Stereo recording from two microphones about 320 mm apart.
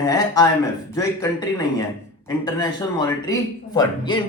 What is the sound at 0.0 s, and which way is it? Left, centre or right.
Speech, centre.